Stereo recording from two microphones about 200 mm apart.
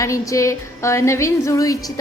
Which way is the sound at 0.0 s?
15° left (ahead or behind).